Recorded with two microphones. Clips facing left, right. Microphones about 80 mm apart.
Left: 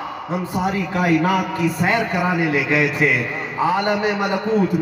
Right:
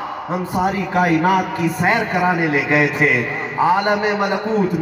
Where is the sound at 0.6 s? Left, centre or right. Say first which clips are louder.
Right 4 dB; right.